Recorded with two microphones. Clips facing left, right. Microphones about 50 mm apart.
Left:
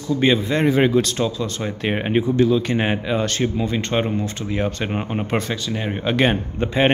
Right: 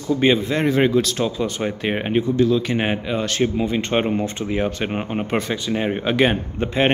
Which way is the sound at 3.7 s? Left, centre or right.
Centre.